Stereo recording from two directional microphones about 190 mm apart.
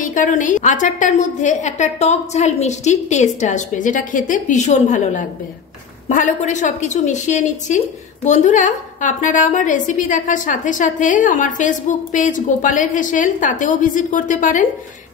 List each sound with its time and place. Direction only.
0.0 s a woman's voice: 40° left (ahead or behind)